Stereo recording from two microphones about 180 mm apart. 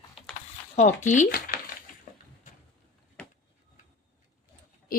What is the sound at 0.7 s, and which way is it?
Speech, 40° left (ahead or behind).